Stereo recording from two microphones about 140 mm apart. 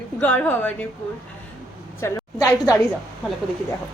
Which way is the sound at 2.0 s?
20° left (ahead or behind).